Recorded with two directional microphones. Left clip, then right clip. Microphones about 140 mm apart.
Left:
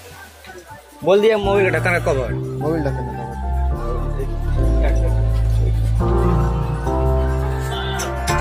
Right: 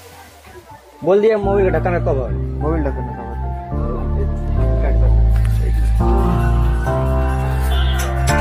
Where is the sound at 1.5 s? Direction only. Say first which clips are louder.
Right 1 dB; 30° right (ahead or behind).